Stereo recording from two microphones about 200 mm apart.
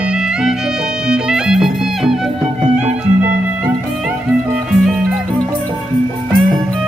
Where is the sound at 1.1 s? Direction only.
5° right (ahead or behind).